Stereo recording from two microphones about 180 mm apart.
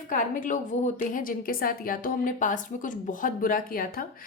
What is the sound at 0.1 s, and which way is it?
A woman's voice, 45° left (ahead or behind).